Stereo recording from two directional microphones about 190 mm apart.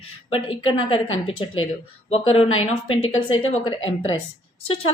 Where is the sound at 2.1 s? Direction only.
30° left (ahead or behind).